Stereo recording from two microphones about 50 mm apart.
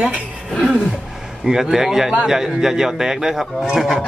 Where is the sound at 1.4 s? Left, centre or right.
Centre.